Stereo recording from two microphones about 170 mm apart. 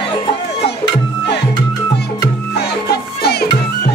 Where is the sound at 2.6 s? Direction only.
70° left (ahead or behind).